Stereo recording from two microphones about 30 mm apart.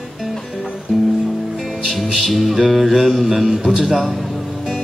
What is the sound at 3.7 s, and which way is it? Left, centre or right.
Speech, centre.